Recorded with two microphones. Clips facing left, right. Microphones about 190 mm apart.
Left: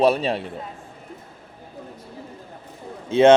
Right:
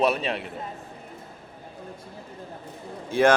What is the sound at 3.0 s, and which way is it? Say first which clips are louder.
Speech: left 6 dB; 25° left (ahead or behind).